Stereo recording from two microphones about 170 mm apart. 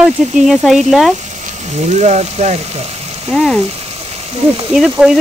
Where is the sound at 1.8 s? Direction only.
40° right (ahead or behind).